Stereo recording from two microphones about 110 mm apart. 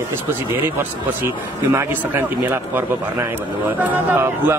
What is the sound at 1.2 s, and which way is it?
Speech, 25° right (ahead or behind).